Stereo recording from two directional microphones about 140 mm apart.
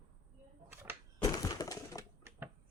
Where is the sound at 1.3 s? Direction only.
25° left (ahead or behind).